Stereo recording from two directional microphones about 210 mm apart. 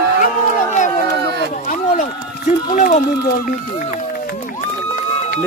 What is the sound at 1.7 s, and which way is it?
Run, 40° left (ahead or behind).